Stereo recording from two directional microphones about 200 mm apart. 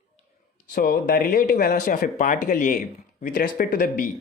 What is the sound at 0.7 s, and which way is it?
Speech, 50° left (ahead or behind).